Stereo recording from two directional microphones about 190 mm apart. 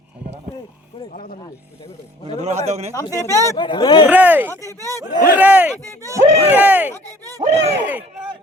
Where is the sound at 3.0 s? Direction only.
15° left (ahead or behind).